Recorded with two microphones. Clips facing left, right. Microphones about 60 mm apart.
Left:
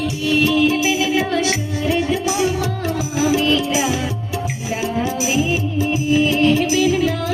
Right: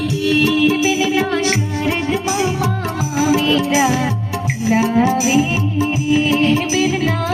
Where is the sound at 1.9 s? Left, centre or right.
Right.